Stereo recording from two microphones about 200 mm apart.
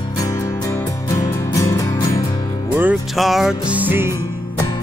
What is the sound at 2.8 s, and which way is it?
Music, 5° right (ahead or behind).